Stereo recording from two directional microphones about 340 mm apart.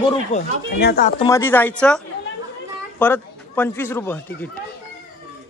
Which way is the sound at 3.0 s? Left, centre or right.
Centre.